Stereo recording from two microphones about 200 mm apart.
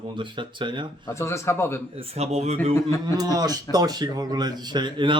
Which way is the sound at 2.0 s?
30° right (ahead or behind).